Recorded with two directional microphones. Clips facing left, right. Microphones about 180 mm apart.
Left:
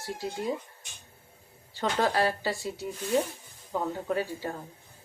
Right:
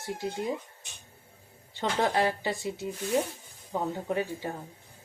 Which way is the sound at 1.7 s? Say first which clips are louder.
Even; 20° right (ahead or behind).